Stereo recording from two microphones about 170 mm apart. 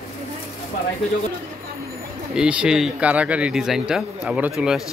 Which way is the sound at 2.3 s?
5° right (ahead or behind).